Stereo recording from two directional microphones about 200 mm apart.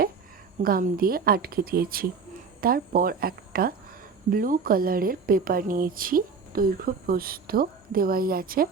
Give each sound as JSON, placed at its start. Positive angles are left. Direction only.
{"t": 0.6, "sound": "a woman's voice", "side_deg": -45}